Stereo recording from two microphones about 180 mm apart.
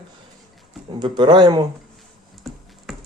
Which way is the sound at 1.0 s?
25° right (ahead or behind).